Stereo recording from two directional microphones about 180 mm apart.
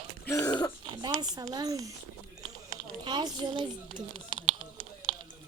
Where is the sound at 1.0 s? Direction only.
20° right (ahead or behind).